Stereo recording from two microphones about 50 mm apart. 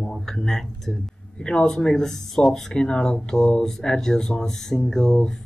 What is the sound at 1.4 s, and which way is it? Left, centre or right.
Speech, centre.